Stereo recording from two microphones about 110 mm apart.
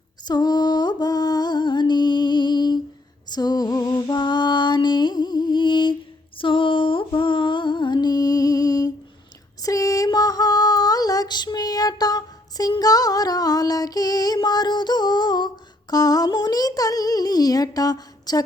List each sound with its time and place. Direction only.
0.3 s music: 40° left (ahead or behind)
3.2 s lullaby: 40° left (ahead or behind)
9.6 s female singing: 30° left (ahead or behind)
14.4 s a sound: 40° left (ahead or behind)
15.9 s child singing: 35° left (ahead or behind)